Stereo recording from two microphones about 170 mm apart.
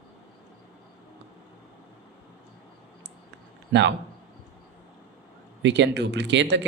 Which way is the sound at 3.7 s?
90° right.